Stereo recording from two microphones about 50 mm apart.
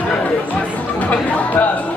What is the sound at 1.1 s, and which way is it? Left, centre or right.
Speech, left.